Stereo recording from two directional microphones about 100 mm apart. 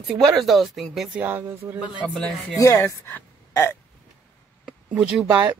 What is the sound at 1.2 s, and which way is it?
Speech, 20° right (ahead or behind).